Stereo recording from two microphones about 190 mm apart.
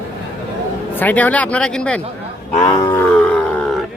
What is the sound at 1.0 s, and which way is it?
Speech, 10° left (ahead or behind).